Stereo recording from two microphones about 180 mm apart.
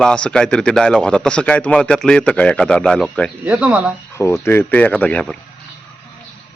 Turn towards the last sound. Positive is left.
turn(degrees=5)  # may be behind; listen again after turning